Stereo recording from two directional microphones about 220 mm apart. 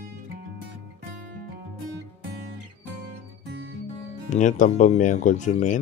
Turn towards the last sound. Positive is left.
turn(degrees=35)  # may be behind; listen again after turning